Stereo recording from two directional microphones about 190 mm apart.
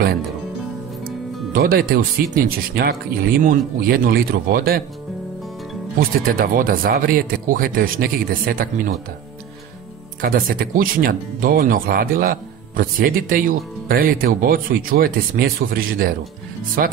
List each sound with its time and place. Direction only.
1.0 s music: 50° right (ahead or behind)
2.3 s speech: 50° right (ahead or behind)
5.9 s speech: 50° right (ahead or behind)
10.2 s speech: 50° right (ahead or behind)